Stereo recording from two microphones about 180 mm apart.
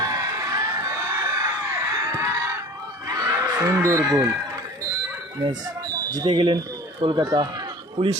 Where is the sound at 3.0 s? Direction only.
20° right (ahead or behind).